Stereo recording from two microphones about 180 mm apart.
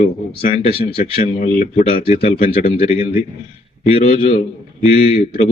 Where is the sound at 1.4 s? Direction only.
45° left (ahead or behind).